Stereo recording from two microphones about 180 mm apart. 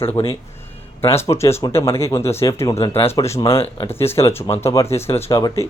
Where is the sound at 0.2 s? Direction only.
25° left (ahead or behind).